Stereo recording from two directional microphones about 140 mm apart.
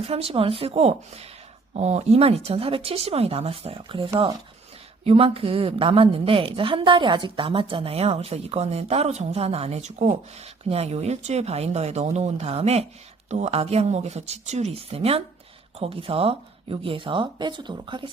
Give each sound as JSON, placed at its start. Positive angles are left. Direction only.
{"t": 0.0, "sound": "a woman's voice", "side_deg": -45}